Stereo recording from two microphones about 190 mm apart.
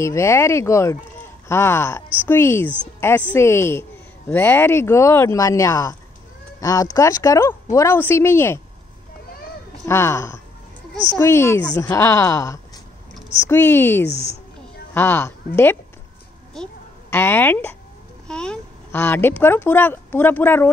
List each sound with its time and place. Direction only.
0.0 s speech: 15° left (ahead or behind)
9.8 s speech: 15° left (ahead or behind)
16.6 s a woman's voice: centre (ahead or behind)
17.1 s speech: 10° left (ahead or behind)
18.2 s a sound: 5° left (ahead or behind)
19.4 s speech: 10° left (ahead or behind)